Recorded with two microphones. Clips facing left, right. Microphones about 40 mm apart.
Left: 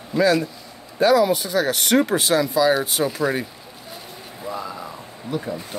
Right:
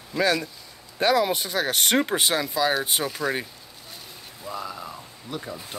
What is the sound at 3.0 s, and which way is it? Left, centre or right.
Speech, centre.